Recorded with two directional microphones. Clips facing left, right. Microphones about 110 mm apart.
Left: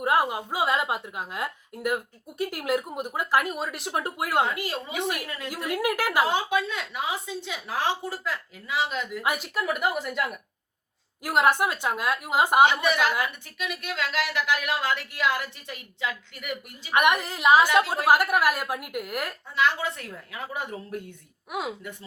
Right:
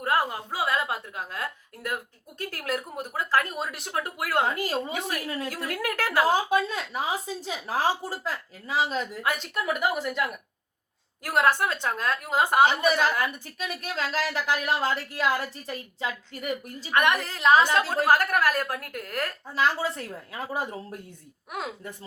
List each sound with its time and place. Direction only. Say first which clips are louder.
0.0 s a woman's voice: left 2 dB; 15° left (ahead or behind)
3.5 s a woman's voice: left 1 dB; centre (ahead or behind)
3.9 s speech: left 1 dB; 20° left (ahead or behind)
4.4 s speech: right 2 dB; 40° right (ahead or behind)
4.9 s a woman's voice: left 3 dB; 5° left (ahead or behind)
5.5 s a woman's voice: left 3 dB; 15° left (ahead or behind)
6.2 s speech: right 2 dB; 35° right (ahead or behind)
9.2 s a woman's voice: left 3 dB; 15° left (ahead or behind)
9.6 s a woman's voice: right 1 dB; centre (ahead or behind)
11.2 s a woman's voice: left 1 dB; 15° left (ahead or behind)
12.6 s speech: even; 35° right (ahead or behind)
16.9 s a woman's voice: left 1 dB; 15° left (ahead or behind)
19.5 s speech: even; 35° right (ahead or behind)